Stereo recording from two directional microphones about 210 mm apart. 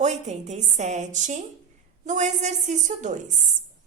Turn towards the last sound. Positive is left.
turn(degrees=-35)  # may be behind; listen again after turning